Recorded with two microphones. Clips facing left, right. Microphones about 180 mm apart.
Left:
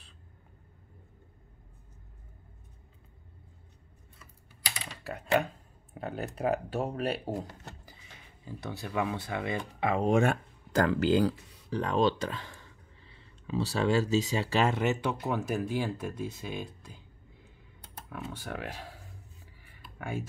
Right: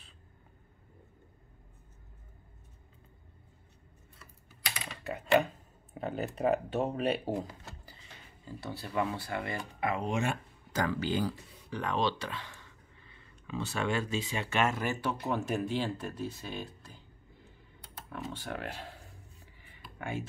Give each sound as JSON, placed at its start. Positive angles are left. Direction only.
{"t": 5.0, "sound": "speech", "side_deg": 0}
{"t": 8.9, "sound": "speech", "side_deg": 10}
{"t": 9.9, "sound": "speech", "side_deg": 50}
{"t": 10.9, "sound": "speech", "side_deg": 75}
{"t": 11.7, "sound": "speech", "side_deg": 40}
{"t": 15.3, "sound": "speech", "side_deg": 10}
{"t": 18.1, "sound": "speech", "side_deg": 10}
{"t": 19.4, "sound": "a sound", "side_deg": 0}